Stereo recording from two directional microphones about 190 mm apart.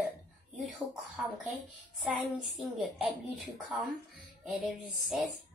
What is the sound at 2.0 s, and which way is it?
A woman's voice, centre (ahead or behind).